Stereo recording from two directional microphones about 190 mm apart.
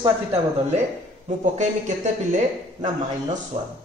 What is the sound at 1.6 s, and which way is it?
Speech, 40° right (ahead or behind).